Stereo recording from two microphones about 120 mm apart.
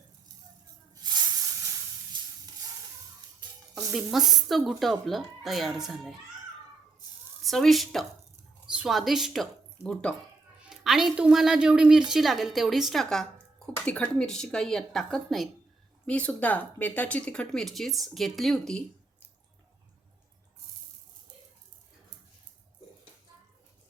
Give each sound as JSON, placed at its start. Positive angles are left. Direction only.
{"t": 1.0, "sound": "hiss", "side_deg": -35}
{"t": 3.9, "sound": "a woman's voice", "side_deg": 0}
{"t": 7.4, "sound": "speech", "side_deg": 0}
{"t": 10.6, "sound": "a woman's voice", "side_deg": -5}